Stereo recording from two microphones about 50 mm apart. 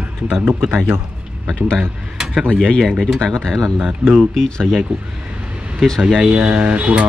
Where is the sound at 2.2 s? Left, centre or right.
Centre.